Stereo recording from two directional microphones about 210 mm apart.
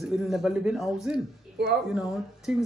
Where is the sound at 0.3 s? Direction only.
Centre (ahead or behind).